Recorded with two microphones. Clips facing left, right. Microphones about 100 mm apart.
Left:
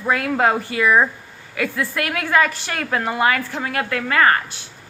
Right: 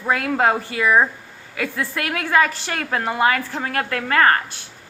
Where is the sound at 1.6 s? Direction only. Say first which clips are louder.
Left 2 dB; 30° right (ahead or behind).